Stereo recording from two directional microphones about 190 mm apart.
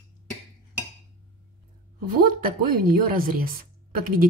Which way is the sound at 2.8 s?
50° right (ahead or behind).